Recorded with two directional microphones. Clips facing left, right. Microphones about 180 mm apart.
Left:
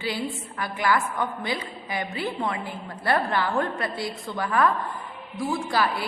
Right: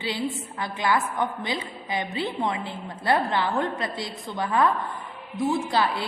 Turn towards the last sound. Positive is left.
turn(degrees=-25)  # may be behind; listen again after turning